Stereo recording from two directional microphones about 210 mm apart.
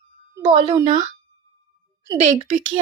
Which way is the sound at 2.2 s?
30° right (ahead or behind).